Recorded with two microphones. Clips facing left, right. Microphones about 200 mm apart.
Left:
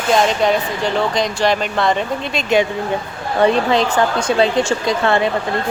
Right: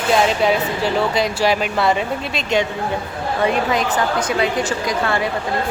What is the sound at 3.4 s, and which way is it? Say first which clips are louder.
A woman's voice: left 5 dB; 30° left (ahead or behind).